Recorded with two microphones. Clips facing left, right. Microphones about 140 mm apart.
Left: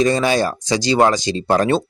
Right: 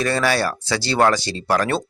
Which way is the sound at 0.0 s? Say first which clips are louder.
Left 4 dB; 20° left (ahead or behind).